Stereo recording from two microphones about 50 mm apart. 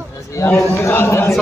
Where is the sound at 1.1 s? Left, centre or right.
Left.